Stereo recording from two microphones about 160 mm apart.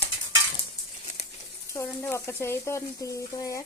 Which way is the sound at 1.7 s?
15° left (ahead or behind).